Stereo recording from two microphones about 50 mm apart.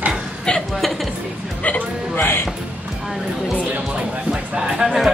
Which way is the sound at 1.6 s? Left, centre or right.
Left.